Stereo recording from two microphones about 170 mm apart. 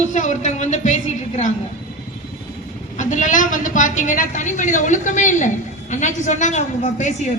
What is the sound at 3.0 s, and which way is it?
A woman's voice, 45° left (ahead or behind).